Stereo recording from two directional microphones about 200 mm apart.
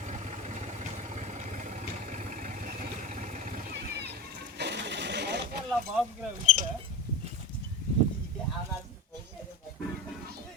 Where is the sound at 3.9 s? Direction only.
55° right (ahead or behind).